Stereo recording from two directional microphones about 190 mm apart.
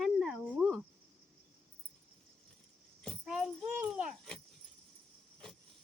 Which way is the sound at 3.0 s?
Centre (ahead or behind).